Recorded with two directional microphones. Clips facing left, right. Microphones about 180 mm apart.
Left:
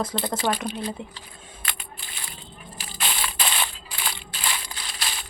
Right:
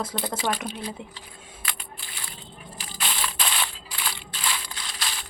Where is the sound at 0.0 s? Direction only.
10° right (ahead or behind).